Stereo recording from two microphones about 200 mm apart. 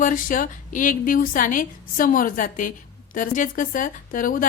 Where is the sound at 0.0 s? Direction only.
40° left (ahead or behind).